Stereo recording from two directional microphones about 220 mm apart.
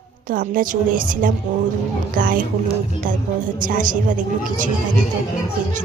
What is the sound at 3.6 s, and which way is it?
Speech, 35° right (ahead or behind).